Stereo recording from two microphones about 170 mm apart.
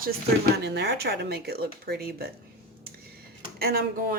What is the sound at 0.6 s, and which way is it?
Speech, 75° right (ahead or behind).